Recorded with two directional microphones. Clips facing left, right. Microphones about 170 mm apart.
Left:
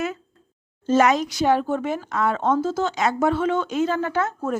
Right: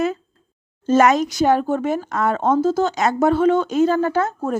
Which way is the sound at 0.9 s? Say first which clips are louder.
Right 3 dB; 45° right (ahead or behind).